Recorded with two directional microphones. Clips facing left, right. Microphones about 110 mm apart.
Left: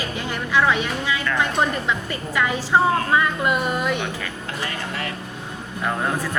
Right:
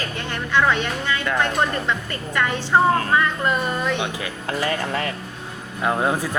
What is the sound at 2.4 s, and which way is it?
A woman's voice, 5° left (ahead or behind).